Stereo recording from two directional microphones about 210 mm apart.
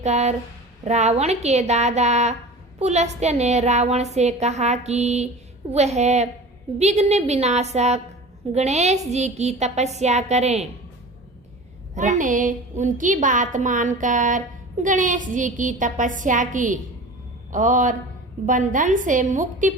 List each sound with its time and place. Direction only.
0.0 s a woman's voice: 30° right (ahead or behind)
11.9 s a woman's voice: 35° right (ahead or behind)